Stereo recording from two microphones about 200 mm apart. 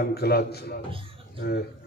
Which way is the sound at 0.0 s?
50° left (ahead or behind).